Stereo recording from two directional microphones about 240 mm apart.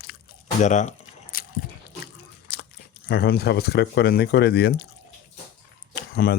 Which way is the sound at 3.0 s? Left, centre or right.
Left.